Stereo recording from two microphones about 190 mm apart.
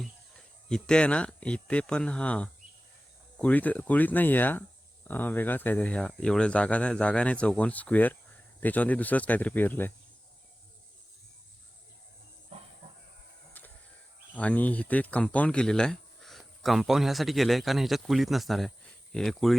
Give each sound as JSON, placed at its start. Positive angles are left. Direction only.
{"t": 0.0, "sound": "speech", "side_deg": 5}
{"t": 14.3, "sound": "speech", "side_deg": 10}